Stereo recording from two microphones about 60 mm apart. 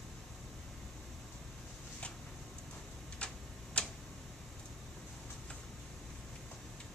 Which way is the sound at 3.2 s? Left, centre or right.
Centre.